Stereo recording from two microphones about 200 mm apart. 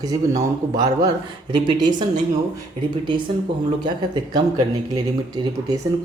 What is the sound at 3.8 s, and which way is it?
Speech, 20° right (ahead or behind).